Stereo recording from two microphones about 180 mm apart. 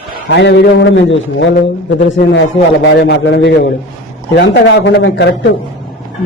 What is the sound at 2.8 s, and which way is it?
A man's voice, 75° left (ahead or behind).